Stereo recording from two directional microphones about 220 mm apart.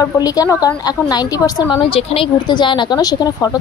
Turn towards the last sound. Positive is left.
turn(degrees=15)  # may be behind; listen again after turning